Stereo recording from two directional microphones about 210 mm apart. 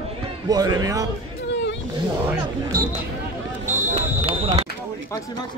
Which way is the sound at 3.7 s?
35° right (ahead or behind).